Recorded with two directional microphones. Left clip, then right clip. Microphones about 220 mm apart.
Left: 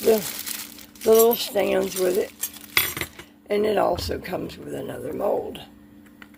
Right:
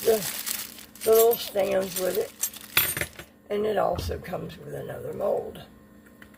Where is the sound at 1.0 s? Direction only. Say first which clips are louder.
Left 3 dB; 35° left (ahead or behind).